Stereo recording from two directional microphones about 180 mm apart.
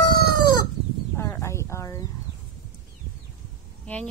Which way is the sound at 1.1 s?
15° left (ahead or behind).